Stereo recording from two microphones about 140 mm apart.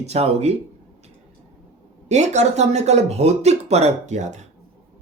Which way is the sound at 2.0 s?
55° right (ahead or behind).